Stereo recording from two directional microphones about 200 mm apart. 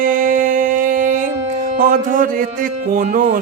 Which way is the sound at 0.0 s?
40° right (ahead or behind).